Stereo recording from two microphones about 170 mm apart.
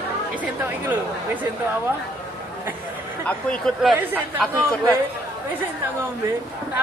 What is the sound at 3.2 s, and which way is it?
Speech, 5° left (ahead or behind).